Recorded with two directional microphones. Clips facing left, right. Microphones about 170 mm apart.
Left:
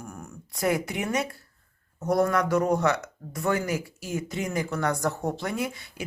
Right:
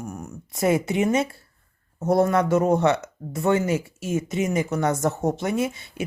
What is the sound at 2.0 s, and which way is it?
Speech, 25° right (ahead or behind).